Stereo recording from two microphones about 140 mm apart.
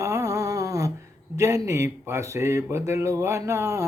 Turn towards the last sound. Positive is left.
turn(degrees=-20)  # may be behind; listen again after turning